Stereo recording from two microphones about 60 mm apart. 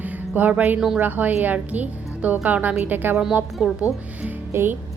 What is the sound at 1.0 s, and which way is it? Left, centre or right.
A woman's voice, right.